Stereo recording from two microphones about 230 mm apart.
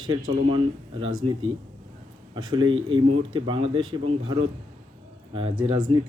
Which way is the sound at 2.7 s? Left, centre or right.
Right.